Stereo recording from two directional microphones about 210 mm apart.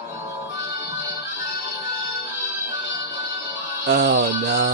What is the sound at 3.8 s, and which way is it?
Music, 50° right (ahead or behind).